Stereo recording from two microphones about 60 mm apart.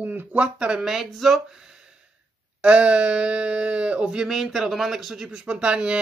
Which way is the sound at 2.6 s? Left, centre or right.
Centre.